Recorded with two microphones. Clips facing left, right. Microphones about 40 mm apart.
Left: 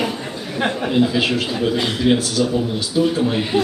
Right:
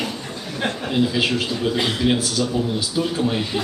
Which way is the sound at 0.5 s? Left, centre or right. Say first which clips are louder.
Left 4 dB; centre.